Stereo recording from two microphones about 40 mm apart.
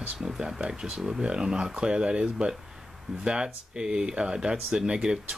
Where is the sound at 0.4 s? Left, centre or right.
Right.